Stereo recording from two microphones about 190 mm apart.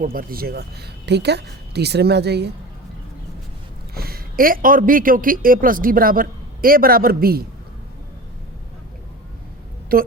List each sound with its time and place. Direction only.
0.0 s a woman's voice: 50° right (ahead or behind)
3.9 s a woman's voice: 55° right (ahead or behind)
9.9 s speech: 50° right (ahead or behind)